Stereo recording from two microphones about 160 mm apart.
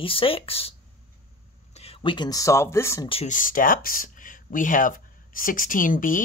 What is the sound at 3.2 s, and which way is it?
Speech, 55° left (ahead or behind).